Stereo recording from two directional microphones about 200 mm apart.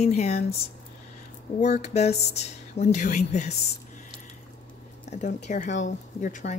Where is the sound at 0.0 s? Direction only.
35° left (ahead or behind).